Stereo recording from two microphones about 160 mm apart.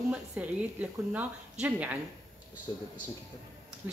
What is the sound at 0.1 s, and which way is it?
A woman's voice, 10° right (ahead or behind).